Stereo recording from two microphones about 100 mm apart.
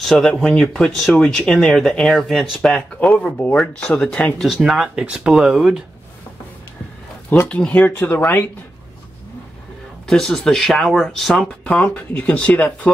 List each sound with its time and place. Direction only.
0.0 s speech: centre (ahead or behind)
4.4 s speech: 5° right (ahead or behind)
7.2 s speech: 15° left (ahead or behind)
10.0 s speech: 5° left (ahead or behind)